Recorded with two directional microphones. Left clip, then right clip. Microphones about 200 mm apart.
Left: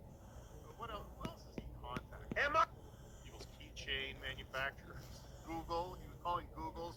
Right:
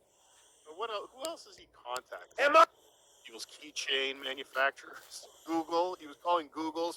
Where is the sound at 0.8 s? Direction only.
45° right (ahead or behind).